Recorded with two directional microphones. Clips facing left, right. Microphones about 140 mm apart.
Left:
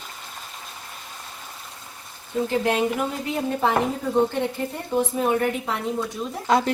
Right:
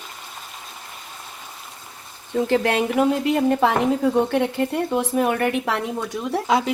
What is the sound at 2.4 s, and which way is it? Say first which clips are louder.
Speech: right 3 dB; 90° right.